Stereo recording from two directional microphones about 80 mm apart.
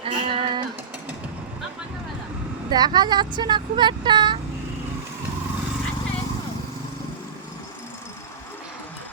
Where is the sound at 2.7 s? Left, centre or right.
Right.